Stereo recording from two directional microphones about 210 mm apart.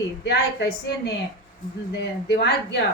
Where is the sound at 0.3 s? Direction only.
55° left (ahead or behind).